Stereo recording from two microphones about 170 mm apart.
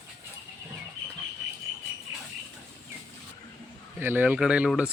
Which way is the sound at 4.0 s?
10° right (ahead or behind).